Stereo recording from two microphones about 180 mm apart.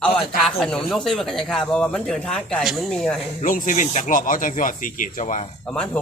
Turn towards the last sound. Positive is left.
turn(degrees=5)  # may be behind; listen again after turning